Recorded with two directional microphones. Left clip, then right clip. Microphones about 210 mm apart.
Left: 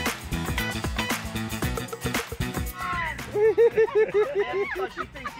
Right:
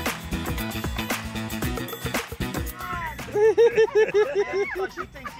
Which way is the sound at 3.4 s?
60° right (ahead or behind).